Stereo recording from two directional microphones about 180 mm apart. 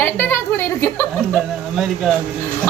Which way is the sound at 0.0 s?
10° left (ahead or behind).